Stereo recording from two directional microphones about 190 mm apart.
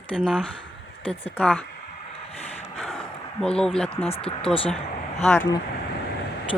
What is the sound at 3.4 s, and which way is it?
Speech, 5° left (ahead or behind).